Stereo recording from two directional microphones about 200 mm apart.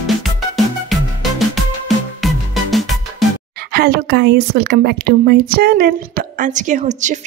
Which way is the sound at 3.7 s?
50° right (ahead or behind).